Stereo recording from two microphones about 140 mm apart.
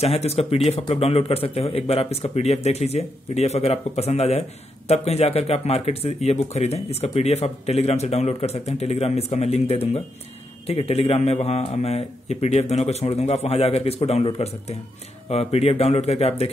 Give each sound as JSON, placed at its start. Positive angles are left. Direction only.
{"t": 0.0, "sound": "a man's voice", "side_deg": 50}